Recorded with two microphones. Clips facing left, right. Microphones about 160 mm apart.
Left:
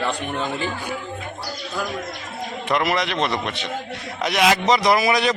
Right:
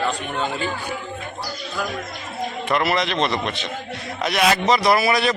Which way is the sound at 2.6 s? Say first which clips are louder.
Even; 15° left (ahead or behind).